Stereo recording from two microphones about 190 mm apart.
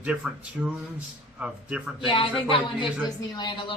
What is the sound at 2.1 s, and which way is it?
Speech, 30° left (ahead or behind).